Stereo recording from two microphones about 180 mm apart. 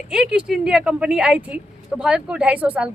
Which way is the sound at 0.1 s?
5° right (ahead or behind).